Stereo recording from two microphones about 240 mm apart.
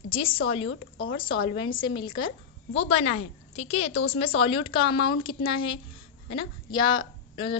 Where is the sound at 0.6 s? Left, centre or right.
Left.